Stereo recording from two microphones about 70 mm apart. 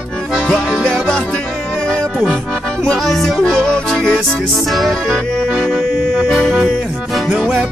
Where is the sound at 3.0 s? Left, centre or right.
Centre.